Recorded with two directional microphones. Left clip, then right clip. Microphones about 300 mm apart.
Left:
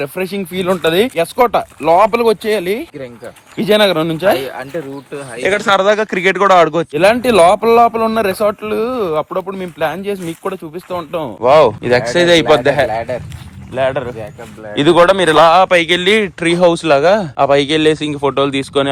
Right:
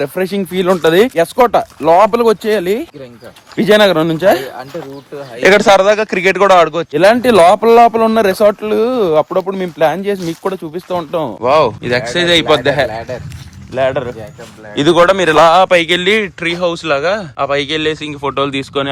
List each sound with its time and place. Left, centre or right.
0.2 s speech: centre
2.1 s speech: right
2.4 s speech: centre
4.4 s speech: left
5.6 s a man's voice: centre
6.9 s speech: centre
9.7 s speech: right
10.0 s a man's voice: centre